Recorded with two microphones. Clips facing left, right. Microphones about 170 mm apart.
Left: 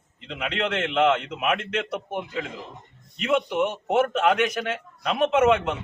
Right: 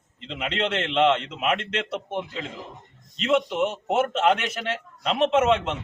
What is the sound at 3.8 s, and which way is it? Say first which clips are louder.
A man's voice: even; 25° right (ahead or behind).